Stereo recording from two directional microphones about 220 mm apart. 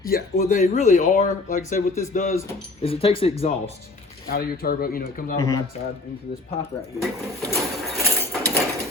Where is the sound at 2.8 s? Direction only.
25° left (ahead or behind).